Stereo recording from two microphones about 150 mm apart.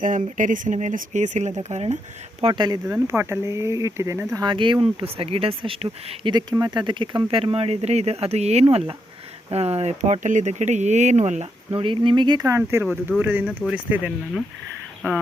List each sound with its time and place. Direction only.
0.0 s speech: 60° right (ahead or behind)
2.4 s speech: 30° right (ahead or behind)
2.9 s speech: 15° right (ahead or behind)
4.4 s speech: 30° right (ahead or behind)
6.3 s speech: 25° right (ahead or behind)
13.5 s speech: 5° left (ahead or behind)
13.7 s speech: 10° right (ahead or behind)